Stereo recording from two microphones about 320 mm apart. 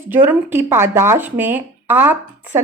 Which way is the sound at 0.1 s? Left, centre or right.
Centre.